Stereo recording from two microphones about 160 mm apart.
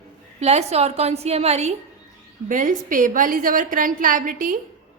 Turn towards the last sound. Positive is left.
turn(degrees=-60)  # may be behind; listen again after turning